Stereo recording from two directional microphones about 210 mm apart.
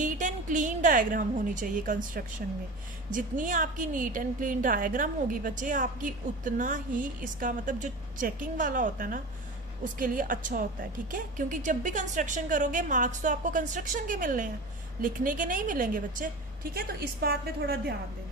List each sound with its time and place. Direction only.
0.0 s a woman's voice: 35° right (ahead or behind)